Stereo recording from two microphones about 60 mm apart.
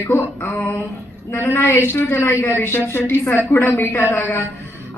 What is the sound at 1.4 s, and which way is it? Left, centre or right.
A man's voice, left.